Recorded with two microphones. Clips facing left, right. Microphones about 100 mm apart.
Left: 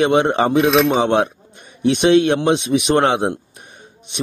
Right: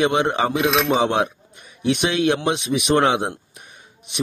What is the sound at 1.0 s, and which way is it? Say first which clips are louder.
Speech: left 4 dB; 30° left (ahead or behind).